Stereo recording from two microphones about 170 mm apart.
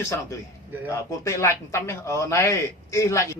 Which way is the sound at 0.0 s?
15° left (ahead or behind).